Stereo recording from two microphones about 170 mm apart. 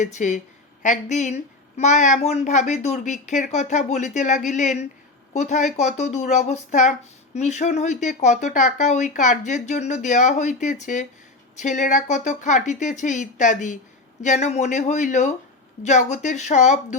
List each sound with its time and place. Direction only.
0.0 s a woman's voice: 45° left (ahead or behind)